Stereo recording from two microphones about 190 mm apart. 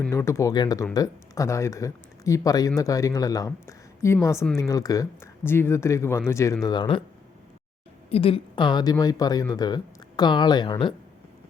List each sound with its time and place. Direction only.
0.0 s speech: 15° left (ahead or behind)
4.4 s speech: 5° left (ahead or behind)
4.7 s speech: 20° left (ahead or behind)
8.1 s speech: 30° left (ahead or behind)